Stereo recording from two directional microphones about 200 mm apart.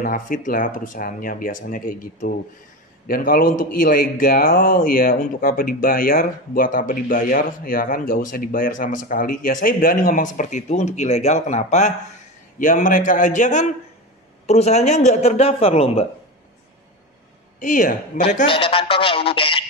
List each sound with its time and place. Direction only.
0.0 s speech: 45° left (ahead or behind)
17.6 s speech: 40° left (ahead or behind)
18.5 s speech: 25° left (ahead or behind)